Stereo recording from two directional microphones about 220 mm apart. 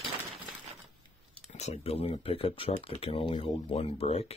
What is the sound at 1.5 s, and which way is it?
Speech, 30° left (ahead or behind).